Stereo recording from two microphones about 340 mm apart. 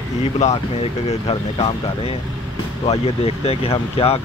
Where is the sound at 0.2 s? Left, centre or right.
Centre.